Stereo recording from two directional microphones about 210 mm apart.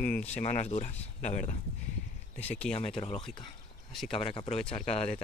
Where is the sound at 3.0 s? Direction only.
30° left (ahead or behind).